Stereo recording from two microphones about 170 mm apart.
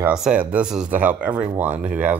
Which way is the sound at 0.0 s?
5° right (ahead or behind).